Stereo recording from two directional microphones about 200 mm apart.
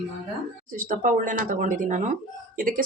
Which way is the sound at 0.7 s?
40° right (ahead or behind).